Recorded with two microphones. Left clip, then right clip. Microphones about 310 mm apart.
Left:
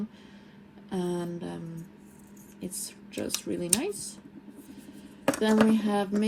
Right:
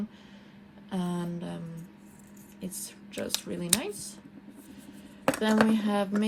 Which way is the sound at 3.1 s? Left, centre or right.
Right.